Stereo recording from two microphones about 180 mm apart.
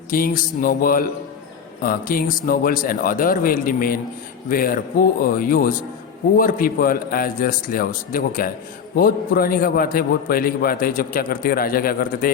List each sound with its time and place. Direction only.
0.1 s a man's voice: 50° left (ahead or behind)